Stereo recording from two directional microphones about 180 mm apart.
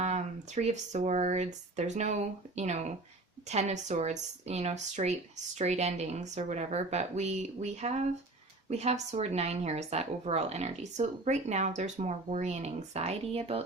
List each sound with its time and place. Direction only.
0.0 s a woman's voice: 40° right (ahead or behind)